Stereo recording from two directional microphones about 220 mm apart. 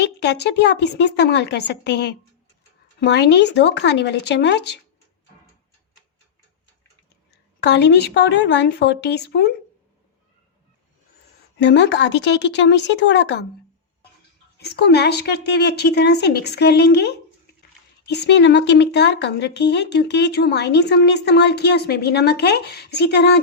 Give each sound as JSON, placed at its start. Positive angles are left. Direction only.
{"t": 0.0, "sound": "a woman's voice", "side_deg": 50}
{"t": 7.6, "sound": "a woman's voice", "side_deg": 50}
{"t": 11.5, "sound": "a woman's voice", "side_deg": 50}
{"t": 14.6, "sound": "a woman's voice", "side_deg": 45}